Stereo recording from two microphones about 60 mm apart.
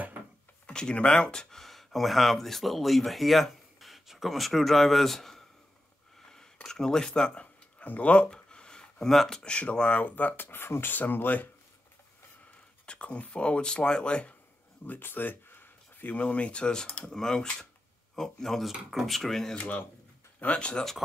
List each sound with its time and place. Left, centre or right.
0.7 s speech: centre
6.3 s a sound: centre
7.8 s a sound: left
9.0 s speech: centre
9.4 s speech: centre
12.8 s speech: centre
14.9 s speech: left; by 19.5 s centre
19.5 s speech: left